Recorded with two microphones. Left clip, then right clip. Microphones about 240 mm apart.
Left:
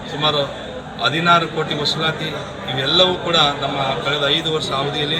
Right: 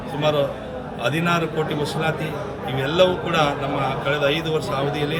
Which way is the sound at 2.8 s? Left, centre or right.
Right.